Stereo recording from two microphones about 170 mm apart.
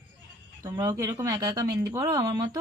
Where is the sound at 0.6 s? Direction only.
20° right (ahead or behind).